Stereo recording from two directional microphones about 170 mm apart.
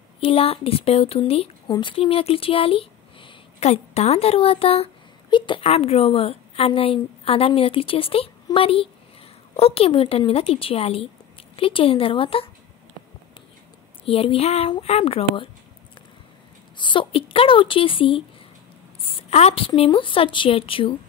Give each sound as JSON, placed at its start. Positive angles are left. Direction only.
{"t": 0.2, "sound": "a woman's voice", "side_deg": 35}
{"t": 14.0, "sound": "speech", "side_deg": 35}
{"t": 16.7, "sound": "speech", "side_deg": 30}